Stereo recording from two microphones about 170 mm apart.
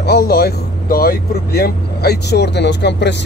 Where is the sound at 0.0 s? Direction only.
65° left (ahead or behind).